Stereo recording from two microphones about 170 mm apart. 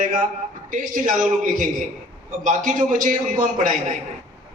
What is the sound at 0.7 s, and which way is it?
A man's voice, 50° right (ahead or behind).